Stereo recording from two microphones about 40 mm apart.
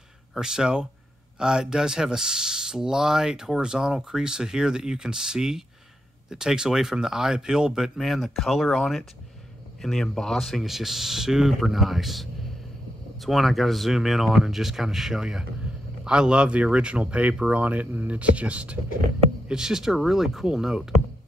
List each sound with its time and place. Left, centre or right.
0.4 s speech: centre
8.0 s speech: centre
9.8 s speech: centre
10.6 s speech: centre; by 18.8 s right
19.5 s speech: centre